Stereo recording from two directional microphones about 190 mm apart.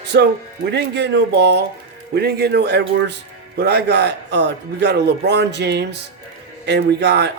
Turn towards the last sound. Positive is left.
turn(degrees=-65)  # may be behind; listen again after turning